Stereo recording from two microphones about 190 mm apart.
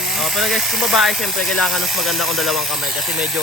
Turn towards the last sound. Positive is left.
turn(degrees=0)  # may be behind; listen again after turning